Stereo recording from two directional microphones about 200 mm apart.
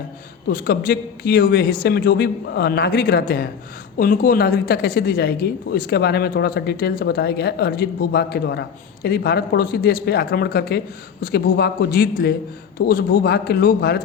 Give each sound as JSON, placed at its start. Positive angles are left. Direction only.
{"t": 0.4, "sound": "a woman's voice", "side_deg": 50}